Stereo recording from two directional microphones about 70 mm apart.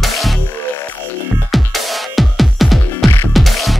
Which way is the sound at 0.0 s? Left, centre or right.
Centre.